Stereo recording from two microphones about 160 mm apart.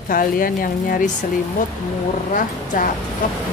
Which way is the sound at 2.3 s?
55° left (ahead or behind).